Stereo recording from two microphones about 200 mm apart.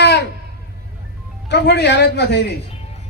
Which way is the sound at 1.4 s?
55° left (ahead or behind).